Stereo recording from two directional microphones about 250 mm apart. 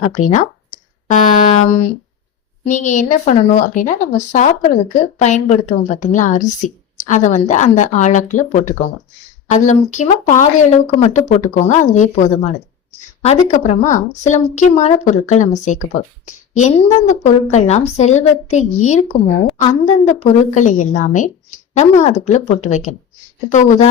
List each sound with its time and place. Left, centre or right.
1.0 s speech: left